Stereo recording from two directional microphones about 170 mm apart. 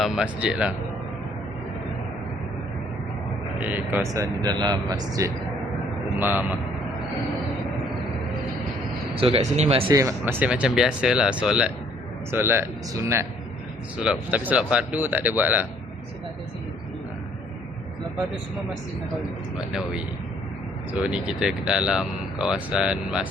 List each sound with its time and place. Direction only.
0.0 s speech: 5° right (ahead or behind)
3.6 s speech: 10° right (ahead or behind)
6.1 s speech: 10° right (ahead or behind)
9.1 s speech: 35° right (ahead or behind)
9.9 s speech: 20° right (ahead or behind)
19.7 s speech: 5° right (ahead or behind)
21.1 s speech: 5° right (ahead or behind)